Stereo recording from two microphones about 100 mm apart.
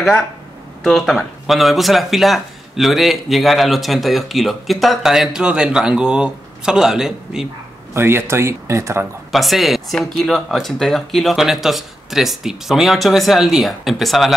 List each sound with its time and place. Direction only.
0.8 s speech: centre (ahead or behind)
7.9 s speech: 25° right (ahead or behind)
9.3 s speech: centre (ahead or behind)